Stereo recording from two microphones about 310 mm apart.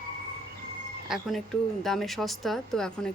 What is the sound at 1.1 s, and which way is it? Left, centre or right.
Speech, centre.